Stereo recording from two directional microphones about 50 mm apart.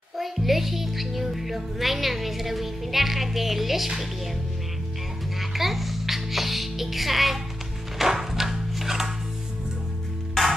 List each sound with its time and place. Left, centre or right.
0.2 s a child's voice: centre
5.4 s music: centre